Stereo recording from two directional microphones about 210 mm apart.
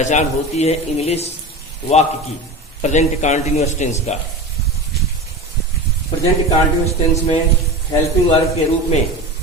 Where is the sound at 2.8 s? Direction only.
35° left (ahead or behind).